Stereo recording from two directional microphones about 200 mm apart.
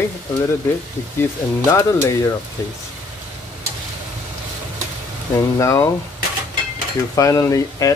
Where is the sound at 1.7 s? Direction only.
15° left (ahead or behind).